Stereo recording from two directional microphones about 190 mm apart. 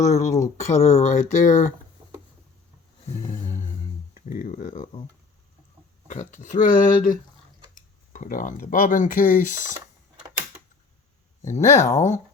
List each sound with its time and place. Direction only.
0.0 s speech: 35° left (ahead or behind)
4.1 s speech: 45° left (ahead or behind)
6.1 s speech: 40° left (ahead or behind)
11.5 s speech: 40° left (ahead or behind)